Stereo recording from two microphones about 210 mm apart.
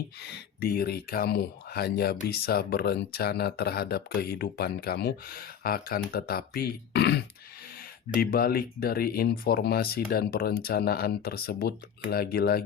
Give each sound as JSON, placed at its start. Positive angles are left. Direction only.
{"t": 0.2, "sound": "speech", "side_deg": 50}
{"t": 8.2, "sound": "speech", "side_deg": 45}